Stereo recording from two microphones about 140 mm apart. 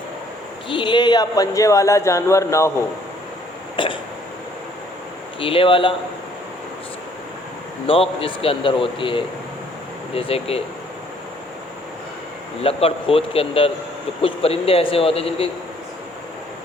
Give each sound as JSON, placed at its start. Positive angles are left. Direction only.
{"t": 0.7, "sound": "a man's voice", "side_deg": 35}
{"t": 3.8, "sound": "speech", "side_deg": 35}
{"t": 5.4, "sound": "speech", "side_deg": 40}
{"t": 8.2, "sound": "speech", "side_deg": 40}
{"t": 12.6, "sound": "speech", "side_deg": 45}